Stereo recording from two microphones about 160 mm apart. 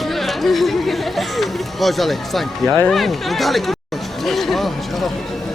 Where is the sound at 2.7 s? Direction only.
15° left (ahead or behind).